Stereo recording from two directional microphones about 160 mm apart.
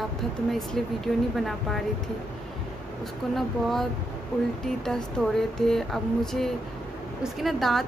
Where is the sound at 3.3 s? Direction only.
Centre (ahead or behind).